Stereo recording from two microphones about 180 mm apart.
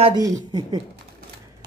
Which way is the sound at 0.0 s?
25° right (ahead or behind).